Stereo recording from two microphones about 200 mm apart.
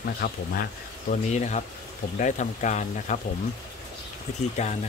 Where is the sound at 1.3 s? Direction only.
35° left (ahead or behind).